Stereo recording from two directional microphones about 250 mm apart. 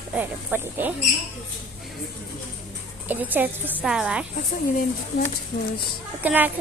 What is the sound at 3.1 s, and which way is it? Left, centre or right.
A woman's voice, centre.